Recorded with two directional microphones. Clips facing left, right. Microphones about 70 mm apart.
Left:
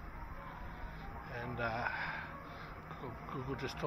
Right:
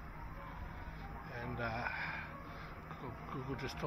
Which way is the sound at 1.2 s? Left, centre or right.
Left.